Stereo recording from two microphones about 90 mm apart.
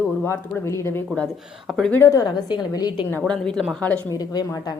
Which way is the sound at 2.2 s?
45° left (ahead or behind).